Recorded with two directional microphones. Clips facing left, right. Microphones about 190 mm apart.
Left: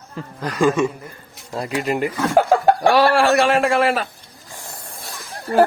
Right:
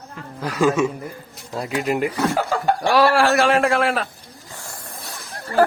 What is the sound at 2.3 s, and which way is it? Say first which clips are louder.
Chuckle: left 7 dB; 55° left (ahead or behind).